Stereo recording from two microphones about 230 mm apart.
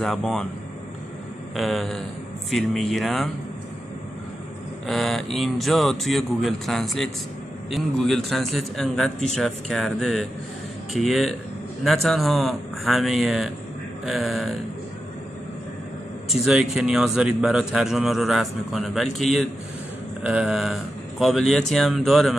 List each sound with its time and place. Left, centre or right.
0.0 s a man's voice: centre
1.5 s a man's voice: centre
4.8 s a man's voice: centre
16.3 s a man's voice: centre